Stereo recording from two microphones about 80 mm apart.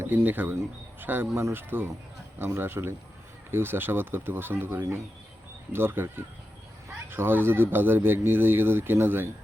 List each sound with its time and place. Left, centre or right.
0.0 s speech: right
1.3 s speech: right